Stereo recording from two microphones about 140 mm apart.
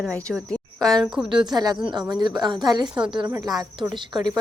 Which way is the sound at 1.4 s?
30° right (ahead or behind).